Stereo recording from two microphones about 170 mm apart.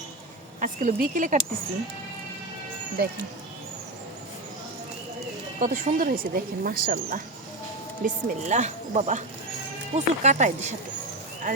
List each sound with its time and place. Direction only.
0.6 s speech: 50° right (ahead or behind)
5.5 s speech: 50° right (ahead or behind)
8.0 s speech: 45° right (ahead or behind)